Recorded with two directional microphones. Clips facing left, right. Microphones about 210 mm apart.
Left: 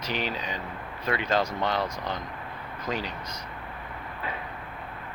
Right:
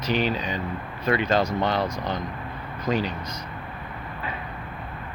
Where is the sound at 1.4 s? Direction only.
25° right (ahead or behind).